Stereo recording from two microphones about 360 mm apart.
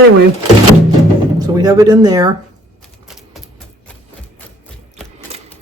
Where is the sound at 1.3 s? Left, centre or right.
Centre.